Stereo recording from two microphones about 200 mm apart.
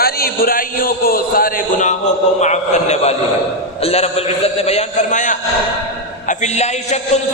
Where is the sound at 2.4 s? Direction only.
35° left (ahead or behind).